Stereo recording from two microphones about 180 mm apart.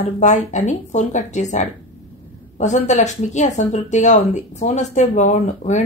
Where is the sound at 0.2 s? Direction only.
40° left (ahead or behind).